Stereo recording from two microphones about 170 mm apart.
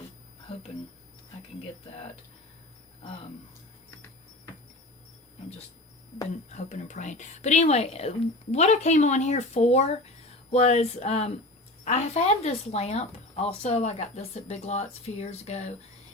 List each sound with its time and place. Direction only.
6.5 s speech: 45° left (ahead or behind)